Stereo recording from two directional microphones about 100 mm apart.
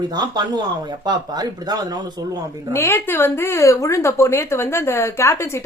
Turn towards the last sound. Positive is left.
turn(degrees=25)  # may be behind; listen again after turning